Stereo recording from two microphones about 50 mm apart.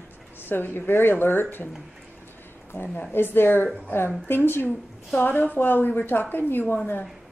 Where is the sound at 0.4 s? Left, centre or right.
Left.